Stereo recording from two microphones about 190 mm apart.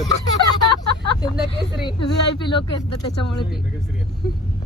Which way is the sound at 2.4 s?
25° left (ahead or behind).